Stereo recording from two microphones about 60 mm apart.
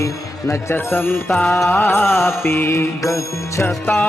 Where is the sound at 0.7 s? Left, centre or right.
Left.